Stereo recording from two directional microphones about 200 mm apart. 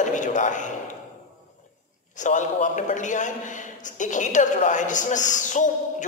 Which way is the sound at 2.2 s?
35° left (ahead or behind).